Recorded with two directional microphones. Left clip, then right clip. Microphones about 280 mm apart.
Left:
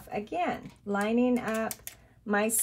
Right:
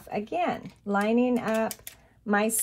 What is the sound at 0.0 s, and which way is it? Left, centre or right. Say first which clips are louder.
Speech: right 3 dB; centre.